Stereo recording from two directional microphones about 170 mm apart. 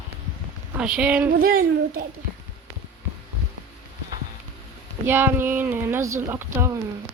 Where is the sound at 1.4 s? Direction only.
60° right (ahead or behind).